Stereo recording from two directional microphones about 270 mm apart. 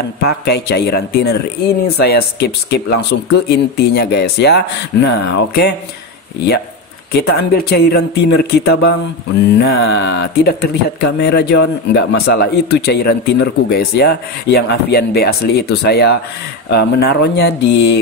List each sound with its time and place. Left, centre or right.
0.2 s speech: left
7.1 s speech: left